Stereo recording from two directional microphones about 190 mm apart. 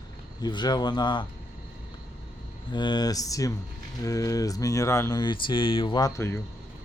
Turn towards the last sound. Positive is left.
turn(degrees=15)  # may be behind; listen again after turning